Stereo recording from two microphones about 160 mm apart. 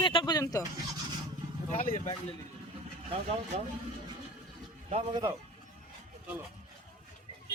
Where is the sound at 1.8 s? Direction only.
55° left (ahead or behind).